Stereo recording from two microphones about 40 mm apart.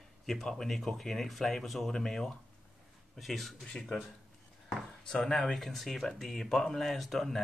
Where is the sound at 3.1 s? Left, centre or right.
Centre.